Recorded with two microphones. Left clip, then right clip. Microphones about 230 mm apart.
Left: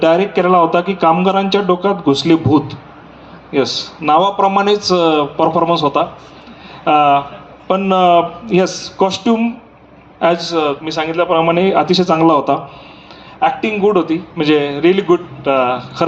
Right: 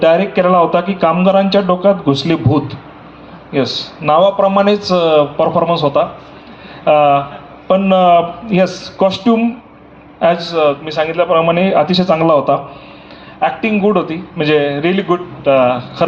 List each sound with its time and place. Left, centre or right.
0.0 s speech: left